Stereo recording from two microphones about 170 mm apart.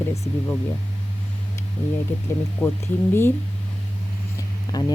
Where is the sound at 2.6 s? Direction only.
5° left (ahead or behind).